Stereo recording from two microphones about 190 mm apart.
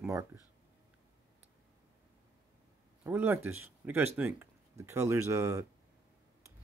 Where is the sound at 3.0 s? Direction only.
10° right (ahead or behind).